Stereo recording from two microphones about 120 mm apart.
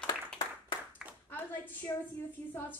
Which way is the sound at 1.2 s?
15° left (ahead or behind).